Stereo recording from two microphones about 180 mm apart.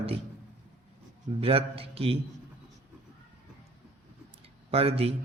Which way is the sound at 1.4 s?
30° right (ahead or behind).